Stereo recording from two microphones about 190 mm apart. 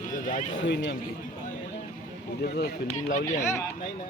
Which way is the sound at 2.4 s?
55° left (ahead or behind).